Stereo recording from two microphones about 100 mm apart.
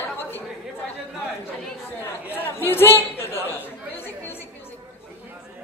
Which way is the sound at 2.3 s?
20° left (ahead or behind).